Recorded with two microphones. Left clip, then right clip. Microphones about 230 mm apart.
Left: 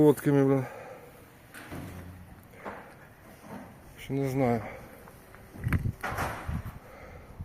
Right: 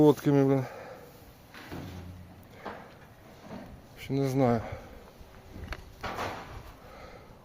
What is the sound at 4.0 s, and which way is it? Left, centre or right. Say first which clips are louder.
Speech: right 1 dB; centre.